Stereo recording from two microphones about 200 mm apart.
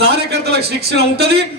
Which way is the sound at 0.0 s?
55° right (ahead or behind).